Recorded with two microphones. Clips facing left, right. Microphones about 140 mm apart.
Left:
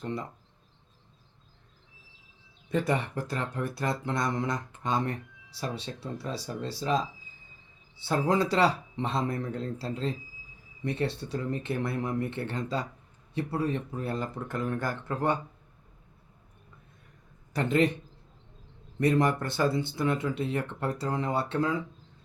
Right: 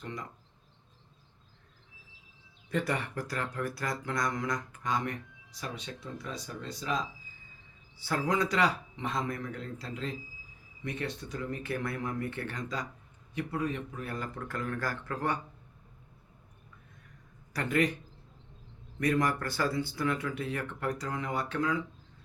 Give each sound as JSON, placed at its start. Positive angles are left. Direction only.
{"t": 0.0, "sound": "speech", "side_deg": 30}
{"t": 2.6, "sound": "speech", "side_deg": 20}
{"t": 17.5, "sound": "a man's voice", "side_deg": 25}
{"t": 18.9, "sound": "speech", "side_deg": 25}